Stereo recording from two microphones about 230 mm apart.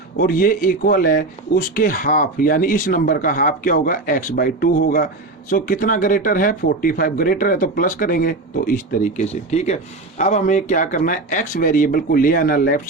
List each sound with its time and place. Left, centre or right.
0.2 s speech: left